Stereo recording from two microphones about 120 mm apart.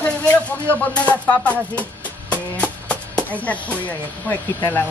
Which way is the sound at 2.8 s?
10° left (ahead or behind).